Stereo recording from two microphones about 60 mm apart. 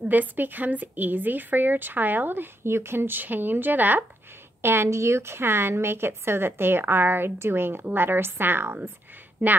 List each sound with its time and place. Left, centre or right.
0.1 s a woman's voice: right
4.6 s a woman's voice: right